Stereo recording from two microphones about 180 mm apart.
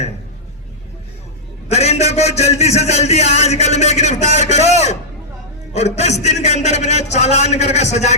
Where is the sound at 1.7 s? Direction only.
35° left (ahead or behind).